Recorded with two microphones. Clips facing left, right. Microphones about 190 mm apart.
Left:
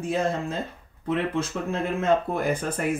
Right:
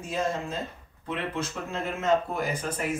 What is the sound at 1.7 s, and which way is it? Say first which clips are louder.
Speech: left 2 dB; 55° left (ahead or behind).